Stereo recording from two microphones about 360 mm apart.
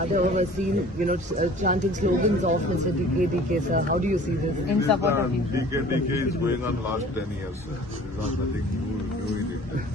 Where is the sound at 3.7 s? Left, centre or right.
Right.